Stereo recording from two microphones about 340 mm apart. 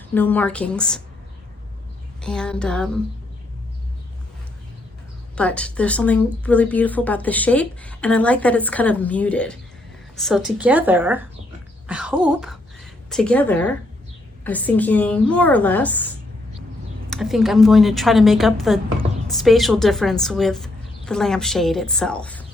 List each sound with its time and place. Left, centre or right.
0.1 s a woman's voice: centre
2.2 s a woman's voice: centre
5.4 s a woman's voice: centre
17.1 s a woman's voice: centre